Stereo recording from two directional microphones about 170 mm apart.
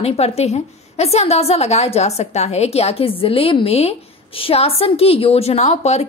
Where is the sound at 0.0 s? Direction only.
35° left (ahead or behind).